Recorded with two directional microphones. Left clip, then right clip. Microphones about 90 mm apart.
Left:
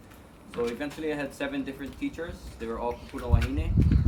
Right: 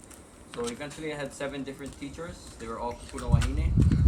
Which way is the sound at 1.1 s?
15° left (ahead or behind).